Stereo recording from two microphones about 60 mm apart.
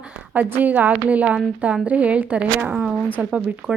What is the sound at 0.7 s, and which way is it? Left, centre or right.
A woman's voice, right.